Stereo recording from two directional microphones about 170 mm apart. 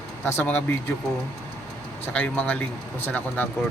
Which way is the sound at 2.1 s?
10° left (ahead or behind).